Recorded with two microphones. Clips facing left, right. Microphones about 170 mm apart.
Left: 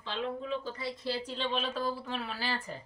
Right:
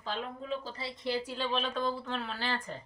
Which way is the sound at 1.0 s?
15° right (ahead or behind).